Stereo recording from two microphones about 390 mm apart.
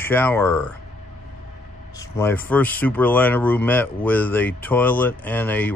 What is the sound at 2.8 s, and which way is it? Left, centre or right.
Speech, centre.